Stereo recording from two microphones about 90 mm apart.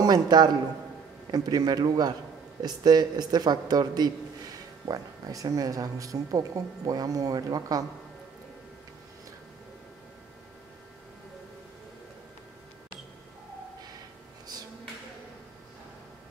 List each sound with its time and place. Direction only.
0.0 s a woman's voice: 50° right (ahead or behind)